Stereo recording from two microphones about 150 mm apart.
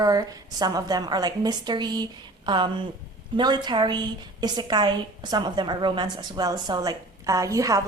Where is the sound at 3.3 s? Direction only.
30° right (ahead or behind).